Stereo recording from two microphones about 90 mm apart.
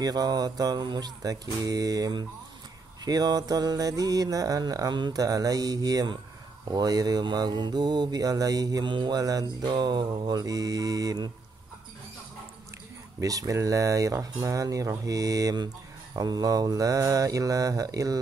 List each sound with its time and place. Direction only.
0.0 s mantra: 45° right (ahead or behind)
13.2 s speech: 40° right (ahead or behind)